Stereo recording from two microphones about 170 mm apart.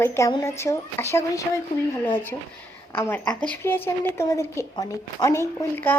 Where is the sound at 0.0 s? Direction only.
15° left (ahead or behind).